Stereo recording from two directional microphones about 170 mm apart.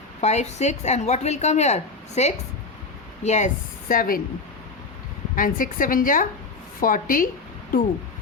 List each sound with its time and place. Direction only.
0.2 s a woman's voice: 40° left (ahead or behind)
5.3 s a woman's voice: 55° left (ahead or behind)